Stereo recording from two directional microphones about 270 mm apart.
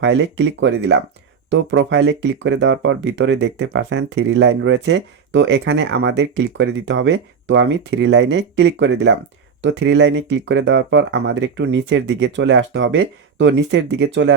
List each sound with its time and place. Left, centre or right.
0.0 s speech: right